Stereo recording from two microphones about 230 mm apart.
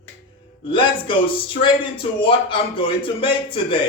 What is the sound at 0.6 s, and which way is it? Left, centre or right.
Speech, left.